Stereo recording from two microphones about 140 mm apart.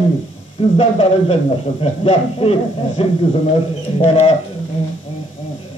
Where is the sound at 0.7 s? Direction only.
45° left (ahead or behind).